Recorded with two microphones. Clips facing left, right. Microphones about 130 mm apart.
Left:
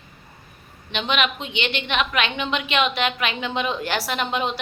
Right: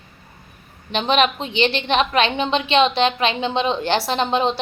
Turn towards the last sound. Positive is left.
turn(degrees=-30)  # may be behind; listen again after turning